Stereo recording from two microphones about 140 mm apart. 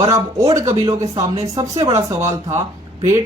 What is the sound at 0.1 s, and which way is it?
Speech, 25° right (ahead or behind).